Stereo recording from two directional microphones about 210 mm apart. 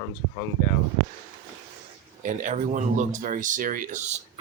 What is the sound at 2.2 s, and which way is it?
Speech, 35° right (ahead or behind).